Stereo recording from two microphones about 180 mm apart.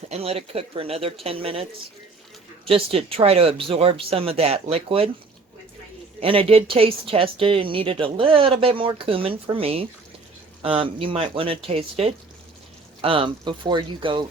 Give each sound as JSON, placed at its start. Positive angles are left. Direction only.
{"t": 0.1, "sound": "speech", "side_deg": -35}
{"t": 2.6, "sound": "speech", "side_deg": -30}
{"t": 6.1, "sound": "speech", "side_deg": -30}